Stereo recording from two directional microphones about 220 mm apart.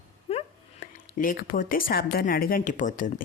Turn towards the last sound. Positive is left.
turn(degrees=35)  # may be behind; listen again after turning